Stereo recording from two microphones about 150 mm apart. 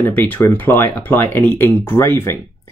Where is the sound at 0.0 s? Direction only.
10° left (ahead or behind).